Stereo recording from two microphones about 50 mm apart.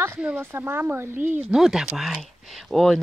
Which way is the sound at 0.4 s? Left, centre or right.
Right.